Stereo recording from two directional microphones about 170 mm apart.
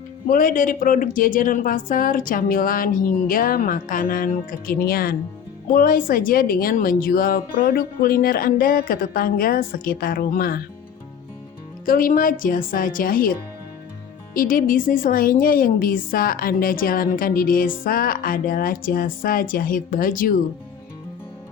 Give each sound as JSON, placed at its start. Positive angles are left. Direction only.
{"t": 0.3, "sound": "a woman's voice", "side_deg": 50}
{"t": 11.9, "sound": "a woman's voice", "side_deg": 55}
{"t": 14.3, "sound": "a woman's voice", "side_deg": 55}